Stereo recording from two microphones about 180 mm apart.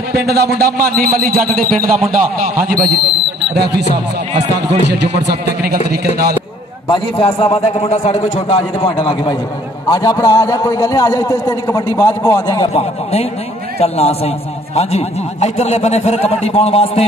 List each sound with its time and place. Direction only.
0.1 s a man's voice: 60° right (ahead or behind)
4.3 s speech: 40° right (ahead or behind)
4.8 s a man's voice: 70° right (ahead or behind)
6.9 s a man's voice: 30° left (ahead or behind); by 12.6 s 15° left (ahead or behind)
12.7 s a man's voice: 35° left (ahead or behind)